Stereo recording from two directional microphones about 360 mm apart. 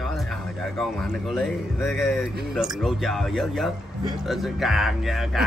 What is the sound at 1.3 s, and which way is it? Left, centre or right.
Speech, centre.